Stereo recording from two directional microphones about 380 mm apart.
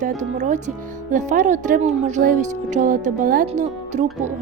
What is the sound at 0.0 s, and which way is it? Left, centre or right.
Speech, centre.